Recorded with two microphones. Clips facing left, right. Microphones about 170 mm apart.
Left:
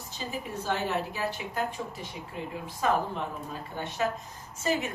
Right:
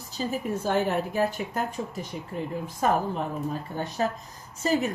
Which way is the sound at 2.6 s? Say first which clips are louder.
Right 2 dB; 45° right (ahead or behind).